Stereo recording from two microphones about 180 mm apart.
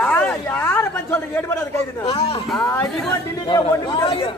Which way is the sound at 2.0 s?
30° left (ahead or behind).